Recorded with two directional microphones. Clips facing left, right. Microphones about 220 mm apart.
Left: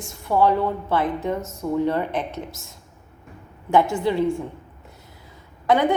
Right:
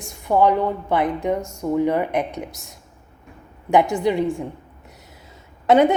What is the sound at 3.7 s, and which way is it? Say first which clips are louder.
Speech: right 2 dB; 15° right (ahead or behind).